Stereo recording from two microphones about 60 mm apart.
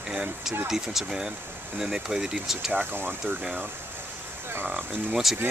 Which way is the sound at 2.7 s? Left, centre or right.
Right.